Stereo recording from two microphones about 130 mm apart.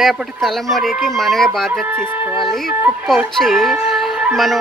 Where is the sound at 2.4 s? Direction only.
Centre (ahead or behind).